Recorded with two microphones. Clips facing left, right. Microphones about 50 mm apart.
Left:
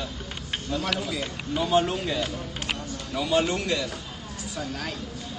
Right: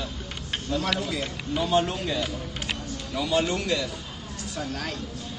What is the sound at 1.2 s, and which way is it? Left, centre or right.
Speech, centre.